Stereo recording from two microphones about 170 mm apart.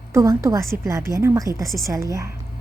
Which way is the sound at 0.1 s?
15° right (ahead or behind).